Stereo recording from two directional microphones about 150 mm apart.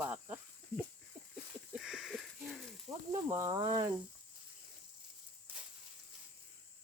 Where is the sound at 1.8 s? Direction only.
5° right (ahead or behind).